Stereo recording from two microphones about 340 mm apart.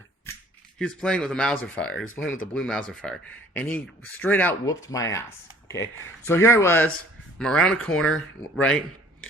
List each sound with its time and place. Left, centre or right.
0.8 s speech: centre